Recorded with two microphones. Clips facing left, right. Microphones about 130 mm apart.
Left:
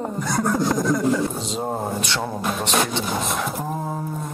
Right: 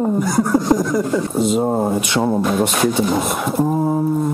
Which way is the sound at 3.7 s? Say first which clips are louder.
Right 10 dB; 15° right (ahead or behind).